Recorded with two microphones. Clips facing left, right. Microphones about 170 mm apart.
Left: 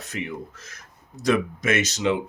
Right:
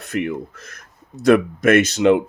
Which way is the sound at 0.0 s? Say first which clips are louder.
Right 8 dB; 60° right (ahead or behind).